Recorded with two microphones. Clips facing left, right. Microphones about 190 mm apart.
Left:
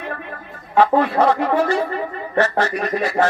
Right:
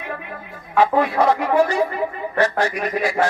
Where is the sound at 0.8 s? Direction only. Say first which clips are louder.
Left 2 dB; 10° right (ahead or behind).